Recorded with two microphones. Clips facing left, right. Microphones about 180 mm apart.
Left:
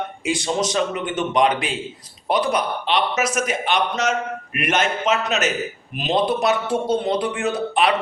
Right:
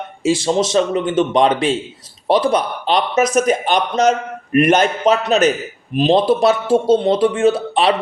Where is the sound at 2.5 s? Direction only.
35° right (ahead or behind).